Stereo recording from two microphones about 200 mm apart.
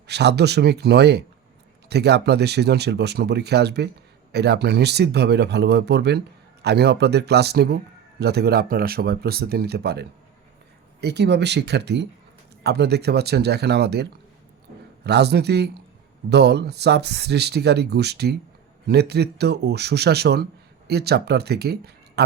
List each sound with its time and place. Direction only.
0.1 s speech: 55° right (ahead or behind)